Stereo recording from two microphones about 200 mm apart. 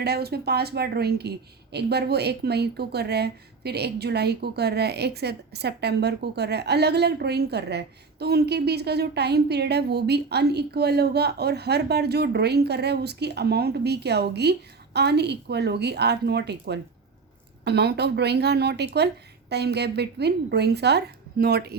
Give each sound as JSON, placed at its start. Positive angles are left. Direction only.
{"t": 0.0, "sound": "a woman's voice", "side_deg": -55}